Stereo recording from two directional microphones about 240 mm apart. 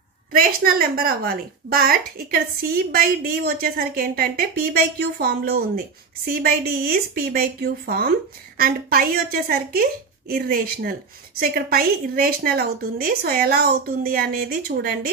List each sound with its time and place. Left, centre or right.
0.3 s a woman's voice: right